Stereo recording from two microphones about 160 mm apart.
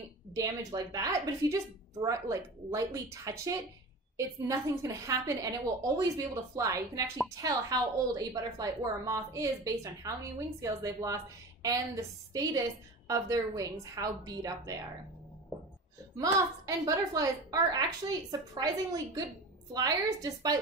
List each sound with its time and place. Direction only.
0.3 s a woman's voice: 20° right (ahead or behind)
16.2 s a woman's voice: 20° right (ahead or behind)